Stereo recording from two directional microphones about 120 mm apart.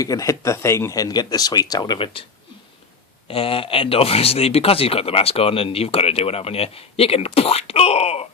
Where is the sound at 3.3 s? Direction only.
50° left (ahead or behind).